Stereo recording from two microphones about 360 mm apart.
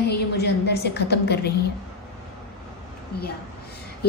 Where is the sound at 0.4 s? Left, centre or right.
Left.